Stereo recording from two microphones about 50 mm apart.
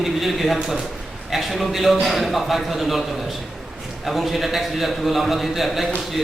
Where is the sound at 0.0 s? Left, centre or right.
Centre.